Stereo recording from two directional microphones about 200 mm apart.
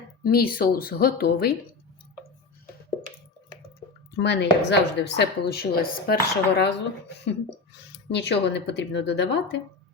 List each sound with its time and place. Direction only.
0.2 s speech: 45° left (ahead or behind)
4.1 s a woman's voice: 60° left (ahead or behind)
7.9 s a woman's voice: 60° left (ahead or behind)